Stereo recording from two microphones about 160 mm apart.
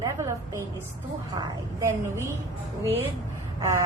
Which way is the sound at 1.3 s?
25° right (ahead or behind).